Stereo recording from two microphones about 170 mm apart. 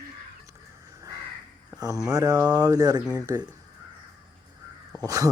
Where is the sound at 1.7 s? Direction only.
20° right (ahead or behind).